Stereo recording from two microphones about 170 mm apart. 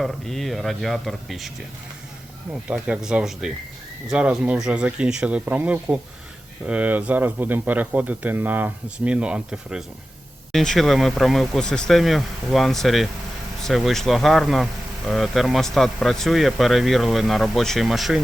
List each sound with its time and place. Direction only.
0.0 s speech: centre (ahead or behind)
2.6 s speech: 5° right (ahead or behind)